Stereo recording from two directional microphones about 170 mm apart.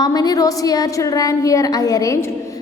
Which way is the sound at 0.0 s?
25° left (ahead or behind).